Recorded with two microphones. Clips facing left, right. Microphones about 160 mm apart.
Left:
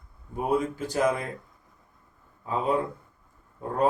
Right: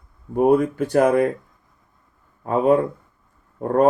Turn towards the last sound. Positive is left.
turn(degrees=-60)  # may be behind; listen again after turning